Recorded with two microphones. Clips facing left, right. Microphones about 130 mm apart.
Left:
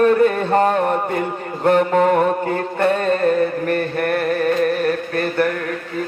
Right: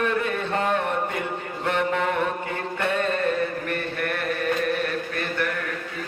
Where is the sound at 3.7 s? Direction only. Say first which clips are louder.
Left 8 dB; 45° left (ahead or behind).